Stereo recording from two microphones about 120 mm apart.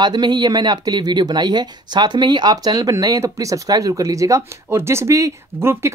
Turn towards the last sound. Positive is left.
turn(degrees=-20)  # may be behind; listen again after turning